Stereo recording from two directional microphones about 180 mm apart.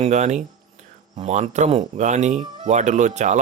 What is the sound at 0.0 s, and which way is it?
A man's voice, 40° right (ahead or behind).